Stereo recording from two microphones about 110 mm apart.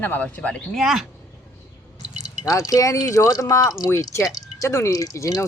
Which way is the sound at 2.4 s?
30° left (ahead or behind).